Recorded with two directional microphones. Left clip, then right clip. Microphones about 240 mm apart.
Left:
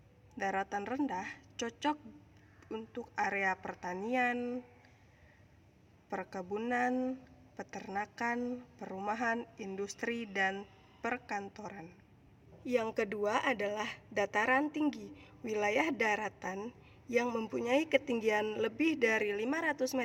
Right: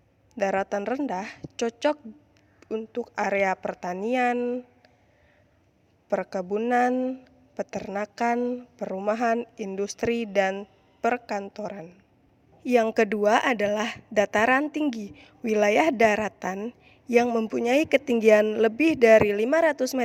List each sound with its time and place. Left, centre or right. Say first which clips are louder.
0.3 s a woman's voice: right 10 dB; right
6.1 s a woman's voice: right 12 dB; right